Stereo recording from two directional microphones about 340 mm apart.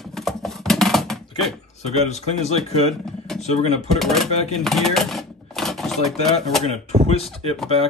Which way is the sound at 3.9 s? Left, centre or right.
Centre.